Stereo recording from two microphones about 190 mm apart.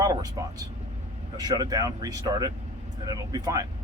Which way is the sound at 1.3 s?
20° right (ahead or behind).